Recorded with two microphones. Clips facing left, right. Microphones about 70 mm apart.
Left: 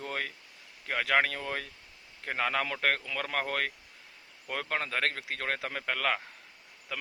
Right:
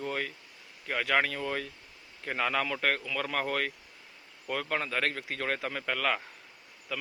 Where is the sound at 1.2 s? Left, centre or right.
Left.